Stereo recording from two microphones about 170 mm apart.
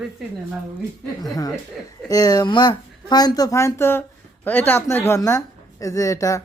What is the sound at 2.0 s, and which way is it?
A man's voice, 20° left (ahead or behind).